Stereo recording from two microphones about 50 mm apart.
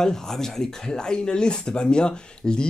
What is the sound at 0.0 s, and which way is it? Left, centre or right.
Speech, centre.